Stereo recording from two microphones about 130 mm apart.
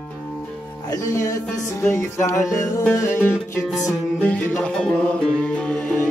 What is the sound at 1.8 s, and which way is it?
Music, 20° left (ahead or behind).